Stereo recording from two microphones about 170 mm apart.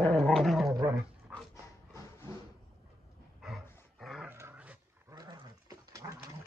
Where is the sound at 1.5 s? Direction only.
15° left (ahead or behind).